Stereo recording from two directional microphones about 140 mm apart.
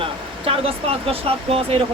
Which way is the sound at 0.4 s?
45° right (ahead or behind).